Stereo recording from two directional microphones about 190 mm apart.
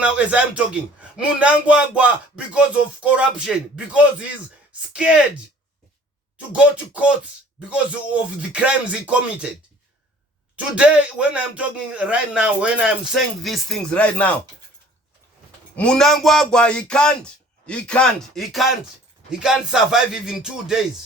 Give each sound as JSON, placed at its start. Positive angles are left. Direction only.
{"t": 0.0, "sound": "a man's voice", "side_deg": -5}
{"t": 4.9, "sound": "speech", "side_deg": -5}
{"t": 6.3, "sound": "a man's voice", "side_deg": -5}
{"t": 10.8, "sound": "speech", "side_deg": -5}
{"t": 15.7, "sound": "speech", "side_deg": 5}